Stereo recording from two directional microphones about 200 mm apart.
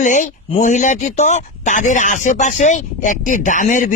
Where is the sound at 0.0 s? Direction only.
40° left (ahead or behind).